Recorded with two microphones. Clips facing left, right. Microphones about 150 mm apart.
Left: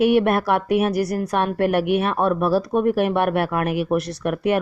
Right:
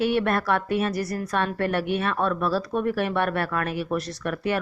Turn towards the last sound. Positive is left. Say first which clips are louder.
# left 6 dB
turn(degrees=55)  # may be behind; listen again after turning